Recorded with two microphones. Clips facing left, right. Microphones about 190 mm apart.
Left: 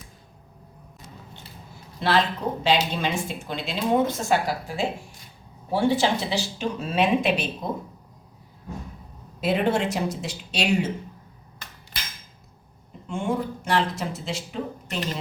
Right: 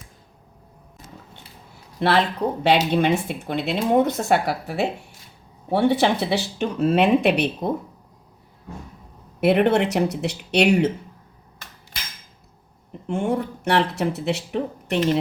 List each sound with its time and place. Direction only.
2.0 s speech: 60° right (ahead or behind)
9.4 s speech: 65° right (ahead or behind)
13.1 s speech: 65° right (ahead or behind)